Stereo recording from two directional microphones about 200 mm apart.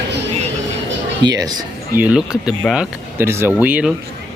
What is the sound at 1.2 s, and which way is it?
Speech, 20° right (ahead or behind).